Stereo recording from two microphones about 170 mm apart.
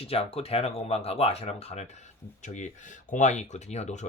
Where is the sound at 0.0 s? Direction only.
35° left (ahead or behind).